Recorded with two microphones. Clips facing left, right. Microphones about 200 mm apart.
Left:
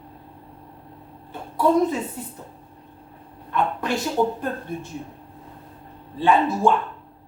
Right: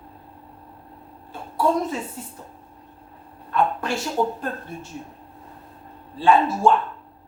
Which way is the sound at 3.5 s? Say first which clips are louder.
Right 1 dB; 20° left (ahead or behind).